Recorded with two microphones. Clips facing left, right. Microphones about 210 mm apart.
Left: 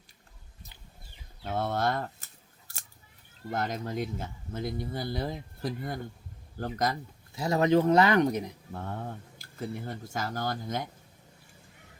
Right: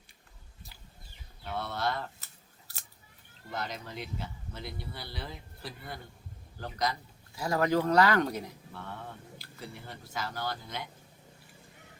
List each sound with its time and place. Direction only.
1.5 s speech: 50° left (ahead or behind)
3.5 s speech: 50° left (ahead or behind)
7.3 s speech: 25° left (ahead or behind)
8.7 s speech: 45° left (ahead or behind)